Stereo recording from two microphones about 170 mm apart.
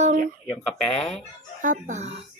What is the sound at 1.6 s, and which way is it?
Speech, 45° right (ahead or behind).